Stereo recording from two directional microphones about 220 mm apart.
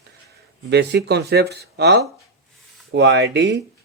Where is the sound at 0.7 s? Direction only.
50° right (ahead or behind).